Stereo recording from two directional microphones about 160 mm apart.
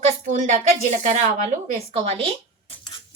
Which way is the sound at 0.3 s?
50° right (ahead or behind).